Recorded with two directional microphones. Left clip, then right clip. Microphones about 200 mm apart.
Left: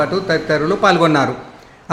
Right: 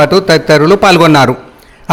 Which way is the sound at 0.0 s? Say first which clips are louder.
Right 10 dB; 45° right (ahead or behind).